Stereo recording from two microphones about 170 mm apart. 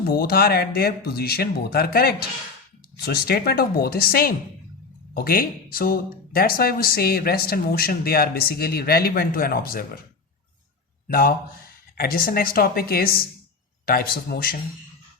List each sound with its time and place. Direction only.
0.0 s speech: 65° left (ahead or behind)
11.1 s speech: 60° left (ahead or behind)